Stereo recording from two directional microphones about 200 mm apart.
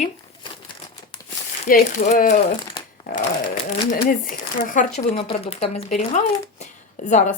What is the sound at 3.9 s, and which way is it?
Speech, 45° left (ahead or behind).